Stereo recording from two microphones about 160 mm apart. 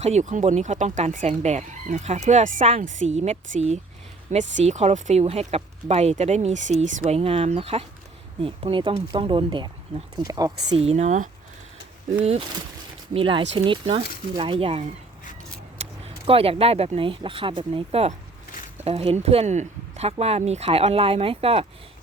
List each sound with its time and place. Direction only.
0.0 s speech: 45° right (ahead or behind); by 10.8 s 25° right (ahead or behind)
10.8 s speech: 40° right (ahead or behind)
13.1 s speech: 35° right (ahead or behind)